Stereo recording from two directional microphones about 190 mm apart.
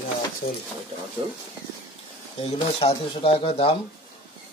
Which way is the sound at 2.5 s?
30° left (ahead or behind).